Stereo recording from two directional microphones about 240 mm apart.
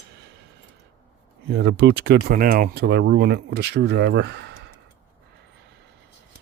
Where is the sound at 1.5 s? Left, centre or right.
Right.